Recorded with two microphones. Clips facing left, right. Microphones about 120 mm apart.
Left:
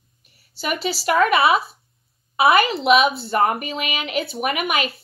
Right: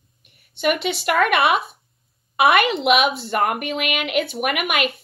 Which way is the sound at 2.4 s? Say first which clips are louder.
Even; 30° left (ahead or behind).